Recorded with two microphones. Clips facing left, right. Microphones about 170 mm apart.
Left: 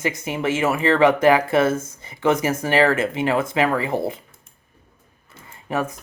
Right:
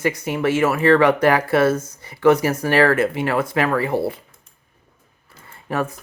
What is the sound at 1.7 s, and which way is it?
Speech, 50° left (ahead or behind).